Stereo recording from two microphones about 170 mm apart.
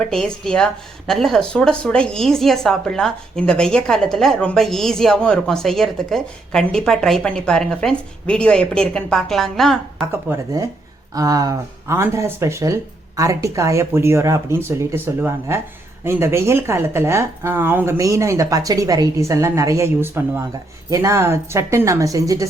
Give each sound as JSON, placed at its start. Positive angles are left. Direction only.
{"t": 0.0, "sound": "speech", "side_deg": 5}
{"t": 10.1, "sound": "speech", "side_deg": -15}